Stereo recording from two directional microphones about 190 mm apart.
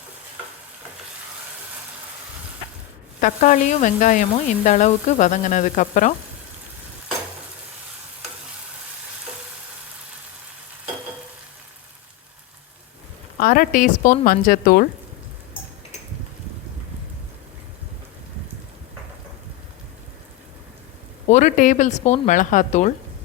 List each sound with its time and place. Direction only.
3.2 s sizzle: 45° left (ahead or behind)
13.4 s speech: 50° left (ahead or behind)
21.2 s sizzle: 40° left (ahead or behind)